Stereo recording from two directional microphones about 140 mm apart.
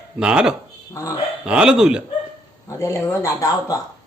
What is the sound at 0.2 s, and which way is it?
A man's voice, 5° right (ahead or behind).